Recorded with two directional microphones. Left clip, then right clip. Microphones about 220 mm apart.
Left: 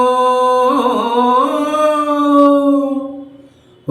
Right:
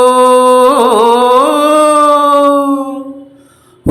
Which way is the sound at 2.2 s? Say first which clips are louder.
Right 3 dB; 45° right (ahead or behind).